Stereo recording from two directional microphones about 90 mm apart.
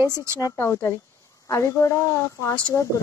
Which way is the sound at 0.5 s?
30° left (ahead or behind).